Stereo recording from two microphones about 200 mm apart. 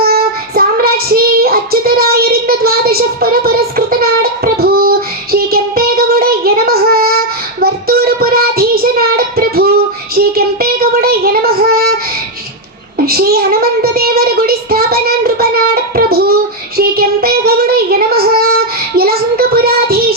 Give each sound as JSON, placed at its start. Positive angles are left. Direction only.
{"t": 0.0, "sound": "child singing", "side_deg": -50}
{"t": 13.1, "sound": "child singing", "side_deg": -50}